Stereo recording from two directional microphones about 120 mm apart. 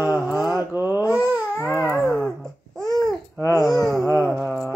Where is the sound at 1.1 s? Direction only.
15° right (ahead or behind).